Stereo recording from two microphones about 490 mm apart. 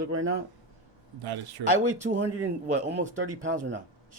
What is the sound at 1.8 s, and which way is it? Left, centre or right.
A man's voice, centre.